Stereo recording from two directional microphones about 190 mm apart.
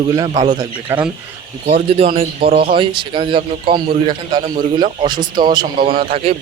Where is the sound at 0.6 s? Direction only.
25° right (ahead or behind).